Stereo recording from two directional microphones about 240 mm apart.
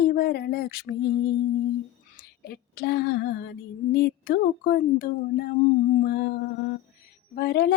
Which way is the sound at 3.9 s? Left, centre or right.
Left.